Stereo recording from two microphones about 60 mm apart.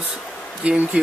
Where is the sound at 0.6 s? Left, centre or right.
Right.